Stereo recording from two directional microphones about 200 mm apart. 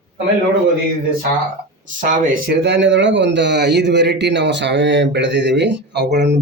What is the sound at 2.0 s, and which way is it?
Speech, 40° right (ahead or behind).